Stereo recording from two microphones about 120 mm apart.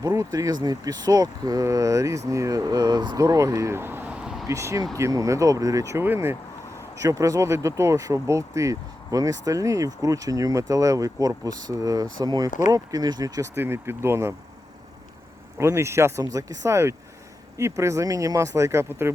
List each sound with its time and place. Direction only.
0.0 s speech: 30° right (ahead or behind); by 4.4 s 5° right (ahead or behind)
4.4 s speech: 25° right (ahead or behind)
12.5 s speech: 90° left
12.7 s speech: 30° right (ahead or behind)
13.6 s speech: 20° right (ahead or behind)
15.5 s speech: 25° right (ahead or behind)